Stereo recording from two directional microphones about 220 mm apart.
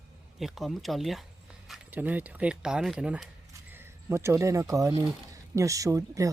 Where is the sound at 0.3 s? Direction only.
Centre (ahead or behind).